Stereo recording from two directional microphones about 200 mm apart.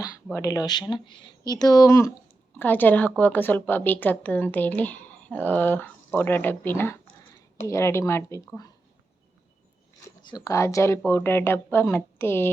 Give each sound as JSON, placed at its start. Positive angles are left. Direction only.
{"t": 0.3, "sound": "speech", "side_deg": 15}
{"t": 10.2, "sound": "speech", "side_deg": 20}